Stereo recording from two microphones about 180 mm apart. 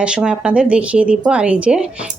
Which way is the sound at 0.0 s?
5° right (ahead or behind).